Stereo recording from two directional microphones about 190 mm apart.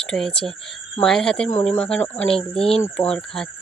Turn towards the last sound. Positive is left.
turn(degrees=5)  # may be behind; listen again after turning